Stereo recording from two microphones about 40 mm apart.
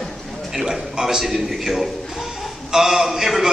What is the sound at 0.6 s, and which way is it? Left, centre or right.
A man's voice, centre.